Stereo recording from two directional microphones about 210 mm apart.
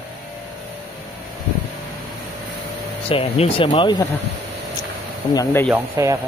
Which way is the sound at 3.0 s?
25° left (ahead or behind).